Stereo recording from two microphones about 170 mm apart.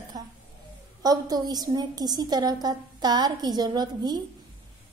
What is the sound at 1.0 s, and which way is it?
A woman's voice, 20° right (ahead or behind).